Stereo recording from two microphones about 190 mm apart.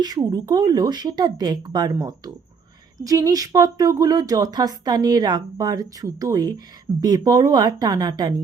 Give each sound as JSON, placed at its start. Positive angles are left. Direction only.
{"t": 0.0, "sound": "speech", "side_deg": -20}